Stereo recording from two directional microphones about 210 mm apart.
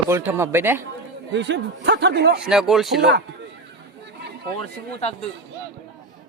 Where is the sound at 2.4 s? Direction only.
5° right (ahead or behind).